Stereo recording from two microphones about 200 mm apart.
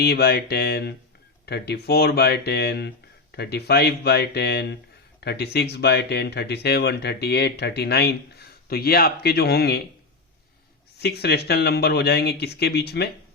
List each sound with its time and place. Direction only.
0.0 s speech: 50° left (ahead or behind)
10.9 s speech: 55° left (ahead or behind)